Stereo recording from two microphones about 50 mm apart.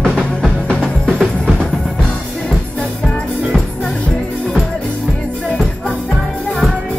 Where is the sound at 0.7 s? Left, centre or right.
Centre.